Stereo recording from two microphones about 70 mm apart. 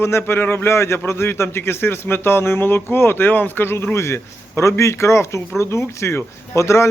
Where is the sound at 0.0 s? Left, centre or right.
Left.